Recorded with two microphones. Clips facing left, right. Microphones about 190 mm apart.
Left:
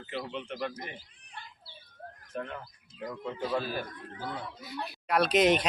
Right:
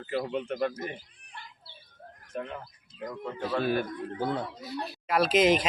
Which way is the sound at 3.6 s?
60° right (ahead or behind).